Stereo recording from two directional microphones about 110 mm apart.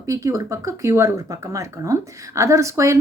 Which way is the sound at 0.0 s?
30° right (ahead or behind).